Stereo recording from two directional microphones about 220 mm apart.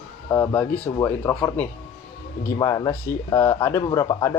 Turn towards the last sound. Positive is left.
turn(degrees=15)  # may be behind; listen again after turning